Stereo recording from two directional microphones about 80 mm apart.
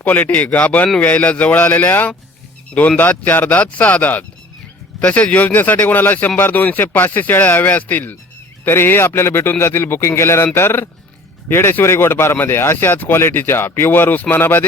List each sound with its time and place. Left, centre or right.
0.0 s a man's voice: left